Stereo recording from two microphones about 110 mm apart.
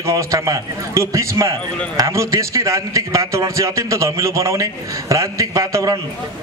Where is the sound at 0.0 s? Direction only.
30° right (ahead or behind).